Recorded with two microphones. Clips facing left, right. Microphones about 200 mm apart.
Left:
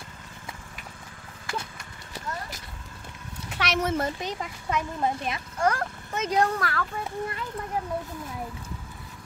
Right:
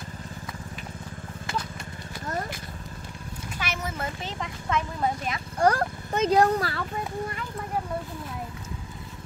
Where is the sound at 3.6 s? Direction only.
80° left.